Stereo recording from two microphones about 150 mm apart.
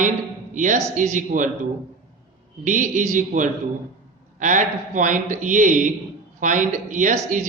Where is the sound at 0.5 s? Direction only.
55° right (ahead or behind).